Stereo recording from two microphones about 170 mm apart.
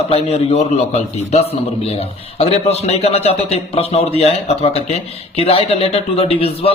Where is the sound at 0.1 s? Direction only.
40° left (ahead or behind).